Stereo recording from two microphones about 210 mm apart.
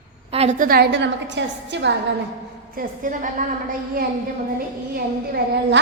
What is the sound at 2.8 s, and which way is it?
A woman's voice, 40° right (ahead or behind).